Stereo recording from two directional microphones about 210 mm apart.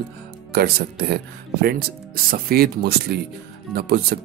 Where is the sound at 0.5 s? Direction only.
50° right (ahead or behind).